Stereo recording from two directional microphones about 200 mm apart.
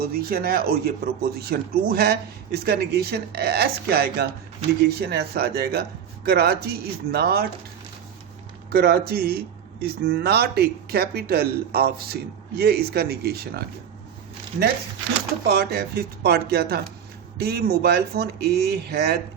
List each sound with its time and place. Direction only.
0.0 s speech: 50° right (ahead or behind)
8.7 s speech: 50° right (ahead or behind)
15.5 s speech: 55° right (ahead or behind)